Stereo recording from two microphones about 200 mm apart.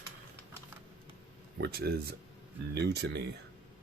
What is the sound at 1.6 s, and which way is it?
Speech, 50° right (ahead or behind).